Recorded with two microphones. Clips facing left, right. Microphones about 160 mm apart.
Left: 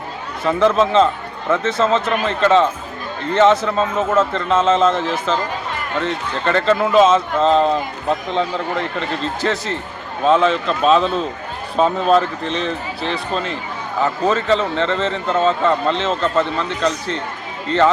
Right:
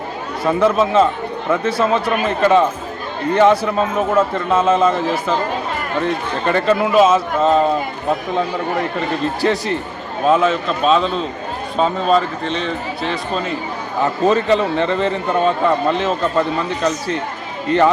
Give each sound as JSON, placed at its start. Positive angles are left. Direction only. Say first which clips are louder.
{"t": 0.4, "sound": "speech", "louder": "even", "side_deg": -10}
{"t": 9.4, "sound": "speech", "louder": "right 4 dB", "side_deg": -15}
{"t": 14.0, "sound": "speech", "louder": "right 3 dB", "side_deg": -20}